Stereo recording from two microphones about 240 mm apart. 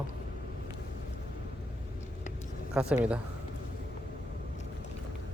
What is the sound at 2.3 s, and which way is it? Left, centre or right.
Vehicle, left.